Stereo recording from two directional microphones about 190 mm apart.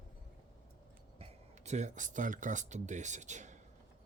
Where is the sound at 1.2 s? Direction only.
35° right (ahead or behind).